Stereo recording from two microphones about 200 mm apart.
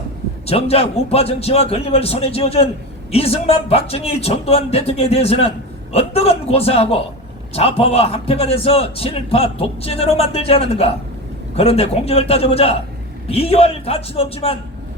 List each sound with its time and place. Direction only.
0.4 s a man's voice: 30° left (ahead or behind)